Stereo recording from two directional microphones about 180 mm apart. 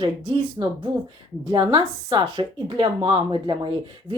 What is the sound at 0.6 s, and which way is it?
Speech, 20° right (ahead or behind).